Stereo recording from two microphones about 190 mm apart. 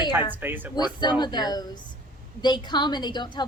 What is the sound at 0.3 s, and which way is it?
Speech, 10° right (ahead or behind).